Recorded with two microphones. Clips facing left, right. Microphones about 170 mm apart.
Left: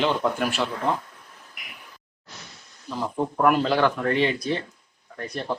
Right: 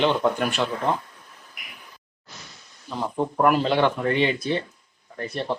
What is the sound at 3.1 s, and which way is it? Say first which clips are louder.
Speech: right 1 dB; centre (ahead or behind).